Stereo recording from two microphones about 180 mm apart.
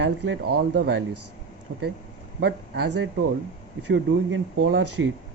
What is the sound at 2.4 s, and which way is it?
Speech, 65° right (ahead or behind).